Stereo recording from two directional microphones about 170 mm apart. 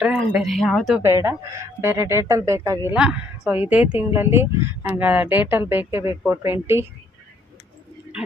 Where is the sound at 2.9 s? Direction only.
5° right (ahead or behind).